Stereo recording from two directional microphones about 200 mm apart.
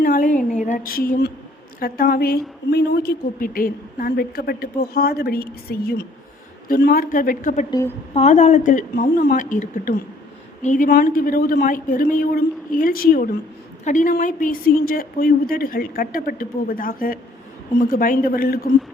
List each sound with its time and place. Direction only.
0.0 s a woman's voice: 45° left (ahead or behind)
7.7 s a woman's voice: 15° left (ahead or behind)
8.1 s a woman's voice: 35° left (ahead or behind)